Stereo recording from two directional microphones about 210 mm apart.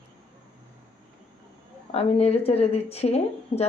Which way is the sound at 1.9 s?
30° left (ahead or behind).